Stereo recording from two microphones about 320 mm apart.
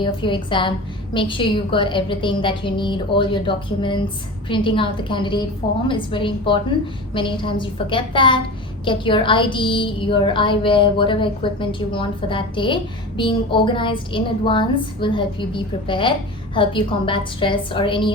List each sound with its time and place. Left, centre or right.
0.0 s a woman's voice: centre